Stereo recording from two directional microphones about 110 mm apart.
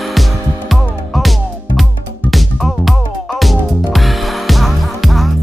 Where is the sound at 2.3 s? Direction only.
Centre (ahead or behind).